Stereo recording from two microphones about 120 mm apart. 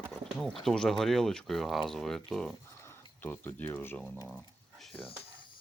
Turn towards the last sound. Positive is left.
turn(degrees=15)  # may be behind; listen again after turning